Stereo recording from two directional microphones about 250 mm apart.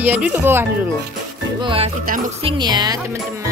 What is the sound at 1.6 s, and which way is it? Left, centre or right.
Music, right.